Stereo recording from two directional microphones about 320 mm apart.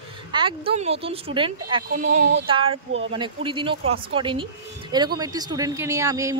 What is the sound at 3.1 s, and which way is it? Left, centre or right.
Speech, centre.